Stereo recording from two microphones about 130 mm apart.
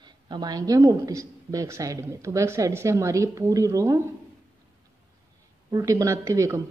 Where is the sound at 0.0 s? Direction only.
35° right (ahead or behind).